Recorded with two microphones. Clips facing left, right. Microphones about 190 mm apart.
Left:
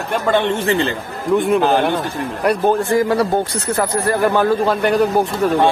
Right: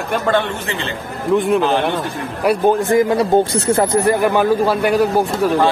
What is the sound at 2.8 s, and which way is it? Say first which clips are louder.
A man's voice: right 1 dB; 20° right (ahead or behind).